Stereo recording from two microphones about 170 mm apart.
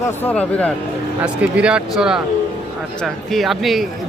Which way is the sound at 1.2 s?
5° right (ahead or behind).